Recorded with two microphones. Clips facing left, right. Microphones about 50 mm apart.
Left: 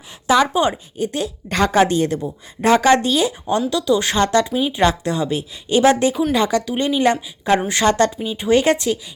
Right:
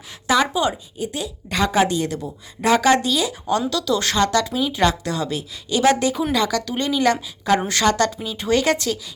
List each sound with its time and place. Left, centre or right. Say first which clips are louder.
0.3 s a woman's voice: left 3 dB; left
0.9 s a woman's voice: left 5 dB; left
2.1 s a woman's voice: left 4 dB; left
2.6 s a woman's voice: left 3 dB; left
3.7 s a woman's voice: left 3 dB; left
8.1 s a woman's voice: left 4 dB; centre